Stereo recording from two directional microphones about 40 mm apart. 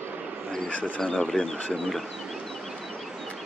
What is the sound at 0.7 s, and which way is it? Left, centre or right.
Speech, left.